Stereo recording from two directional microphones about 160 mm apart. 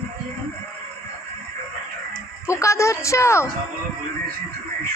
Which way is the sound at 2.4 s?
20° left (ahead or behind).